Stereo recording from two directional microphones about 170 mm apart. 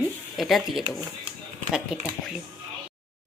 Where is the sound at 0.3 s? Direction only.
Centre (ahead or behind).